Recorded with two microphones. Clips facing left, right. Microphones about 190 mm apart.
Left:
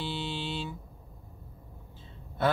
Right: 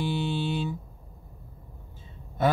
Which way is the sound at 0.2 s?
15° right (ahead or behind).